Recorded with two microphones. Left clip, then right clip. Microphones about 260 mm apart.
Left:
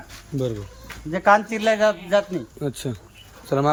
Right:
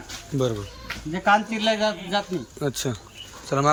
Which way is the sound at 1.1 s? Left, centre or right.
Centre.